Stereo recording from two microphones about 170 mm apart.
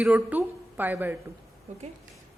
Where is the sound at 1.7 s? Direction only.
40° right (ahead or behind).